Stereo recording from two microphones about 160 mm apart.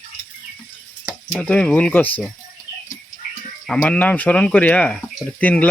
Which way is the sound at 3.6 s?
5° left (ahead or behind).